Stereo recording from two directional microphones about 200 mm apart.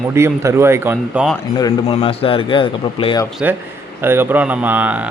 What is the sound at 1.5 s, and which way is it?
Speech, 20° left (ahead or behind).